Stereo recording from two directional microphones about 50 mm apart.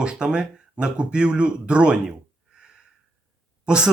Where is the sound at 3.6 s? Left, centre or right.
Centre.